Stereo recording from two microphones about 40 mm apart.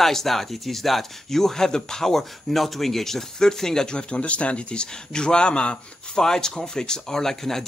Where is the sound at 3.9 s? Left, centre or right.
Left.